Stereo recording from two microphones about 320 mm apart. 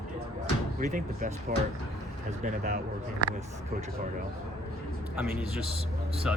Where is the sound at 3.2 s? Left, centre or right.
Left.